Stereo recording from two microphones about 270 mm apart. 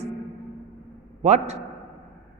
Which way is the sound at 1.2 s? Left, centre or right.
Right.